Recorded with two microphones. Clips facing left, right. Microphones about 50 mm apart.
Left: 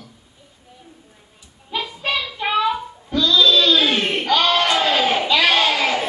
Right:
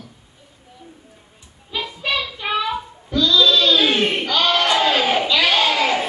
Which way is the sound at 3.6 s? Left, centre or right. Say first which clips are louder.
Right 1 dB; right.